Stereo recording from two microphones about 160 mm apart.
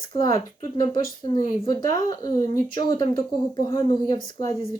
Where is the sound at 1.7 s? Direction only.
25° left (ahead or behind).